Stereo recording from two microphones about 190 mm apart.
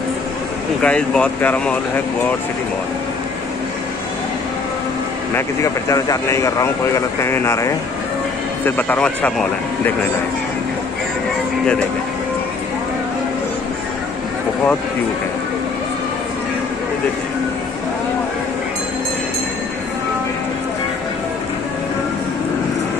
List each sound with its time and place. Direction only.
0.8 s speech: 5° left (ahead or behind)
5.3 s speech: 15° left (ahead or behind)